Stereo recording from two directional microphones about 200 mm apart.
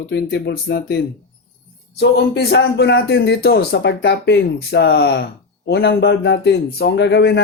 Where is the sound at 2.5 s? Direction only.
55° left (ahead or behind).